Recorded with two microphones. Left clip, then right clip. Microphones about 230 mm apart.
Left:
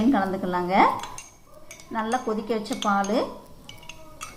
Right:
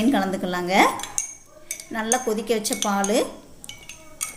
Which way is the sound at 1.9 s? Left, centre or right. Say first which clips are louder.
Right 2 dB; right.